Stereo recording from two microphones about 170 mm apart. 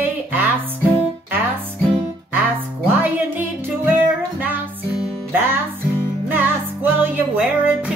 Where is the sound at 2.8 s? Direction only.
10° right (ahead or behind).